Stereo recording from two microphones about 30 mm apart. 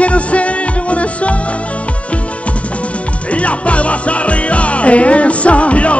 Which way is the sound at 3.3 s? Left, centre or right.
Left.